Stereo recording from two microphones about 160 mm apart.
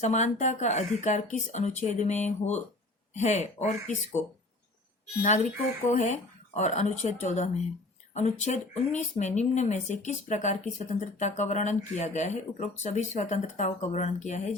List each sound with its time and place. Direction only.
0.0 s speech: 45° left (ahead or behind)
5.2 s speech: 50° left (ahead or behind)